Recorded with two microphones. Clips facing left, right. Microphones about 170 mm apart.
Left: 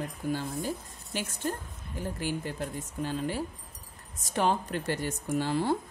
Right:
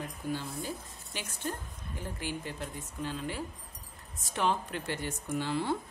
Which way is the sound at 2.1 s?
40° left (ahead or behind).